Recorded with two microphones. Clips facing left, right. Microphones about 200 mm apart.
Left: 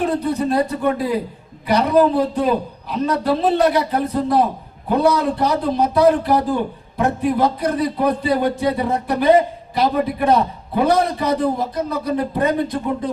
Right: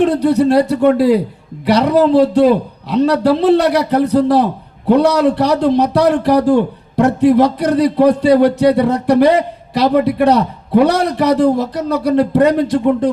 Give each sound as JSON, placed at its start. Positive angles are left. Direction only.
{"t": 0.0, "sound": "a man's voice", "side_deg": -80}